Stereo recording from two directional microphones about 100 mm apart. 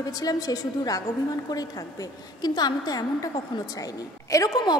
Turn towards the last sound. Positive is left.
turn(degrees=40)  # may be behind; listen again after turning